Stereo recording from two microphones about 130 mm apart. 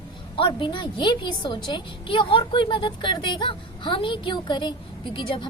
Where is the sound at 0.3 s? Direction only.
40° left (ahead or behind).